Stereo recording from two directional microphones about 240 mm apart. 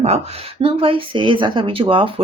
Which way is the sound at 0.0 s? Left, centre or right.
Right.